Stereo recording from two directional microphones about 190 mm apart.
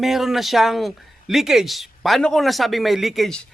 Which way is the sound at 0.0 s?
Centre (ahead or behind).